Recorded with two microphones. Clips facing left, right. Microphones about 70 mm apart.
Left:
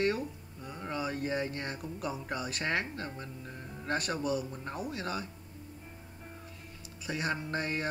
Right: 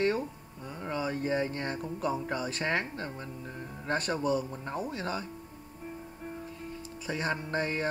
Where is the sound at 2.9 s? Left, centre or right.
Centre.